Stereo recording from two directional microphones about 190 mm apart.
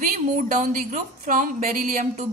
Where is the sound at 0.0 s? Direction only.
45° right (ahead or behind).